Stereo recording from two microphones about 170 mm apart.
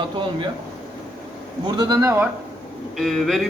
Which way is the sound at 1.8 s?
20° right (ahead or behind).